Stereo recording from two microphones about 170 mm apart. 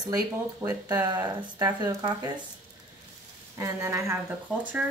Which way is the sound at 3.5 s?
20° right (ahead or behind).